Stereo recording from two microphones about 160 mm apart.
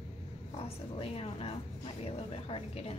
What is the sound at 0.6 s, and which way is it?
Speech, 40° left (ahead or behind).